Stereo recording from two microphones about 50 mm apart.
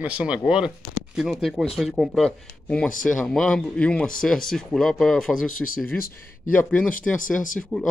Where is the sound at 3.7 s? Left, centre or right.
Left; by 5.8 s centre.